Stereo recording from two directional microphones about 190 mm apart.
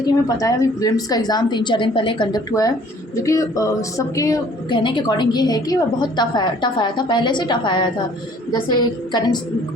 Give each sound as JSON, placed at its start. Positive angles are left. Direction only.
{"t": 0.3, "sound": "speech", "side_deg": 15}
{"t": 9.1, "sound": "speech", "side_deg": 20}